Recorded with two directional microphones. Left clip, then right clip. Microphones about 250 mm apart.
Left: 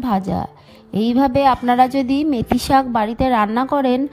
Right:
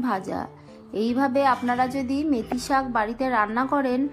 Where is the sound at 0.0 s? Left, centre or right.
Left.